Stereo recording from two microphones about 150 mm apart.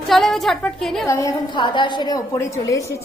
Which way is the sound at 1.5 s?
30° left (ahead or behind).